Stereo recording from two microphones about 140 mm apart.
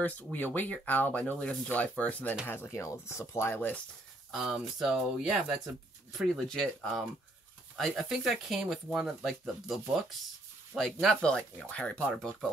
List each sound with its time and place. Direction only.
0.0 s speech: 10° left (ahead or behind)
4.3 s speech: centre (ahead or behind)